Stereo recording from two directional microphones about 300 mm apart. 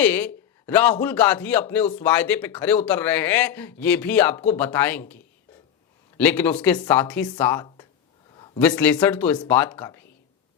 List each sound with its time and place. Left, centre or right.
0.0 s speech: centre